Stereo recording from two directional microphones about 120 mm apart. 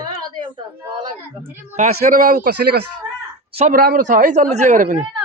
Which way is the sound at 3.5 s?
75° right (ahead or behind).